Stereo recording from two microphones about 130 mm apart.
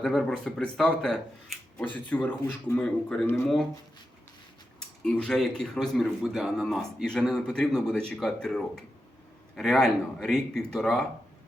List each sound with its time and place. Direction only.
0.0 s speech: centre (ahead or behind)
3.2 s speech: 20° left (ahead or behind)
5.0 s speech: 5° left (ahead or behind)